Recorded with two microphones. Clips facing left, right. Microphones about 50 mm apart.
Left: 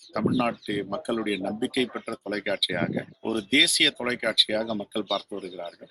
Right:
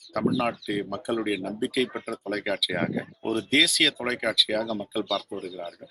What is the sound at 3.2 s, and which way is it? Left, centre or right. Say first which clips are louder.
Speech: right 1 dB; right.